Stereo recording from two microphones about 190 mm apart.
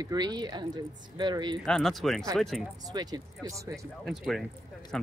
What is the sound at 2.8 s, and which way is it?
Speech, 20° right (ahead or behind).